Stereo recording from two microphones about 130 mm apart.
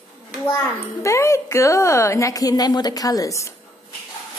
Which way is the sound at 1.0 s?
20° left (ahead or behind).